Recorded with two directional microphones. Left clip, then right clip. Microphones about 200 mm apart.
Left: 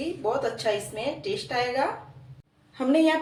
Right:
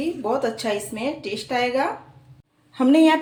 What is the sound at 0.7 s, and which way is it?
Speech, 50° right (ahead or behind).